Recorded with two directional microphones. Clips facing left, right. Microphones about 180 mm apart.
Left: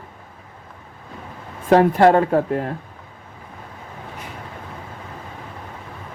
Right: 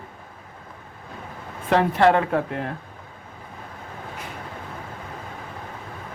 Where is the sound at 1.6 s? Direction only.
45° left (ahead or behind).